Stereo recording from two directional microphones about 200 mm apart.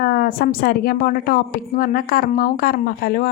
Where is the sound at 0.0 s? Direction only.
45° left (ahead or behind).